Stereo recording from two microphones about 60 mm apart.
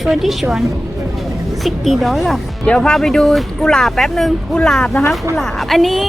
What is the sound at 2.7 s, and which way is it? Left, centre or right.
Speech, centre.